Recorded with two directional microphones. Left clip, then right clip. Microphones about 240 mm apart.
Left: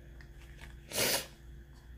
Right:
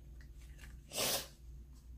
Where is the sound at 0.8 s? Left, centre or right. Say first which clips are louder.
Left 5 dB; left.